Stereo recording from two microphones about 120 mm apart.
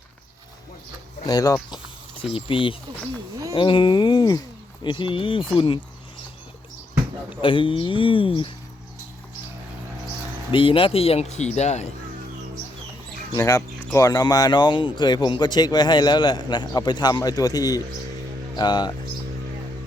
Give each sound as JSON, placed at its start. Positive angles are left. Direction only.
{"t": 1.3, "sound": "speech", "side_deg": 30}
{"t": 2.3, "sound": "speech", "side_deg": 45}
{"t": 7.4, "sound": "speech", "side_deg": 45}
{"t": 10.5, "sound": "speech", "side_deg": 45}
{"t": 13.3, "sound": "speech", "side_deg": 25}